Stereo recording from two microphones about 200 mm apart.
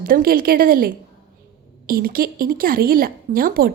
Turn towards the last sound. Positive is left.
turn(degrees=-45)  # may be behind; listen again after turning